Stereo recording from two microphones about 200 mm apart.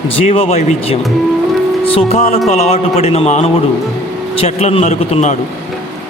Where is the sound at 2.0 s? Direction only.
35° left (ahead or behind).